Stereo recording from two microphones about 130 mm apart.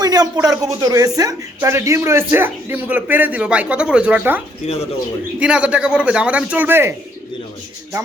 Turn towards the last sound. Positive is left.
turn(degrees=-15)  # may be behind; listen again after turning